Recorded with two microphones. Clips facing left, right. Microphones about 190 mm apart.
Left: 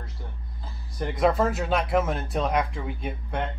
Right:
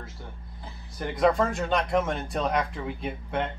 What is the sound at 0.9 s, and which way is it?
Speech, centre (ahead or behind).